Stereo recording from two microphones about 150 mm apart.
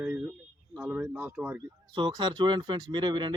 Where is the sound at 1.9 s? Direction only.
30° right (ahead or behind).